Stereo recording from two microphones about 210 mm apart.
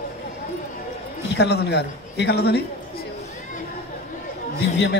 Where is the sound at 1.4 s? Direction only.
50° left (ahead or behind).